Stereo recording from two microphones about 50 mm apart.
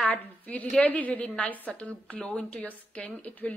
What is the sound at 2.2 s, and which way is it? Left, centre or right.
Speech, centre.